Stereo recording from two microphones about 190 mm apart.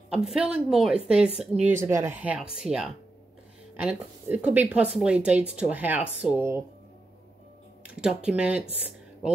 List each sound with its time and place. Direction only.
0.1 s a woman's voice: 5° right (ahead or behind)
7.8 s a sound: 5° right (ahead or behind)
8.3 s a woman's voice: 5° right (ahead or behind)